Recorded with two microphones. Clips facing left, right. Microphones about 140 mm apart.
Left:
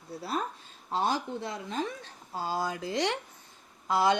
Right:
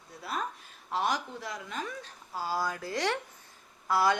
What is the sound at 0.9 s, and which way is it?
A child's voice, 30° left (ahead or behind).